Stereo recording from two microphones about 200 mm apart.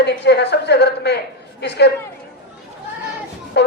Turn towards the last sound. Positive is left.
turn(degrees=55)  # may be behind; listen again after turning